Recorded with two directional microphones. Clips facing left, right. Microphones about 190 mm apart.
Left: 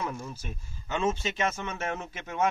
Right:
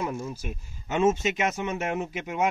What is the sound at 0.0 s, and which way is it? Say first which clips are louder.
Speech: right 4 dB; 15° right (ahead or behind).